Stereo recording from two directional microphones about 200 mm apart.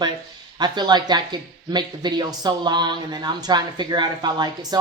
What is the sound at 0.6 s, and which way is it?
Speech, 20° right (ahead or behind).